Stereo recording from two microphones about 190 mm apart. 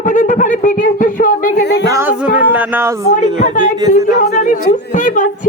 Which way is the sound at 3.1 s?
40° left (ahead or behind).